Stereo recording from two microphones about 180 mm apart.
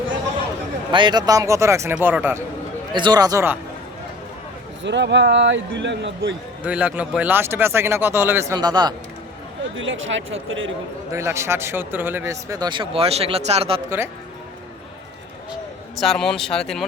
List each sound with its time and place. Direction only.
0.9 s speech: 25° right (ahead or behind)
2.9 s speech: 25° right (ahead or behind)
4.8 s a man's voice: 80° right
6.7 s speech: 5° right (ahead or behind); by 9.0 s 25° right (ahead or behind)
9.7 s speech: 90° right
11.1 s speech: 15° right (ahead or behind); by 13.8 s 30° right (ahead or behind)
16.0 s speech: centre (ahead or behind)